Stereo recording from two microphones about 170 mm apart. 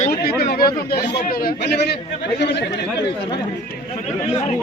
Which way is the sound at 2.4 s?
85° left.